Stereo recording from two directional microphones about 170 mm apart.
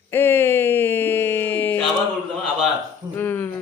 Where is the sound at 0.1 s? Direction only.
15° left (ahead or behind).